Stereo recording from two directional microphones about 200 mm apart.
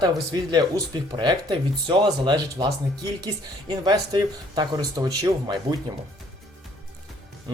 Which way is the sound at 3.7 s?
20° right (ahead or behind).